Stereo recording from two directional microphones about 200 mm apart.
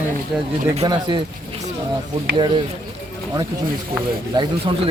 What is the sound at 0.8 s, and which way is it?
Speech, 20° right (ahead or behind).